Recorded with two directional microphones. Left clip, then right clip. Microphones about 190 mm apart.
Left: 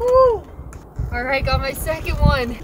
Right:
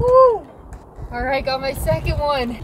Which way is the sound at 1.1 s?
25° left (ahead or behind).